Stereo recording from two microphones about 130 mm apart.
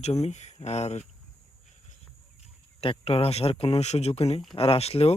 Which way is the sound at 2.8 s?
50° left (ahead or behind).